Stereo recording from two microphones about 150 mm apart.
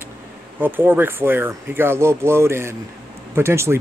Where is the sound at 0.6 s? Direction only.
15° right (ahead or behind).